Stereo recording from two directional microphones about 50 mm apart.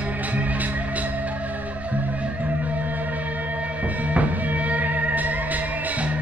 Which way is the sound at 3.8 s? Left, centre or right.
Right.